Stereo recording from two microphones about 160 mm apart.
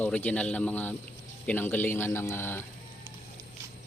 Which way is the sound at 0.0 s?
10° left (ahead or behind).